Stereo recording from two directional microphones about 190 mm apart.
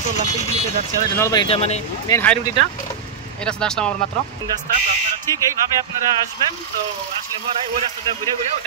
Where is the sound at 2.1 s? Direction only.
10° left (ahead or behind).